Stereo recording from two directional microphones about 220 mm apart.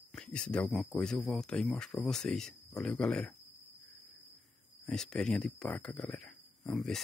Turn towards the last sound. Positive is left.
turn(degrees=0)  # may be behind; listen again after turning